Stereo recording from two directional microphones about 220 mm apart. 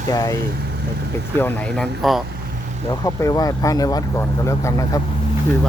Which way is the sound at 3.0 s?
15° left (ahead or behind).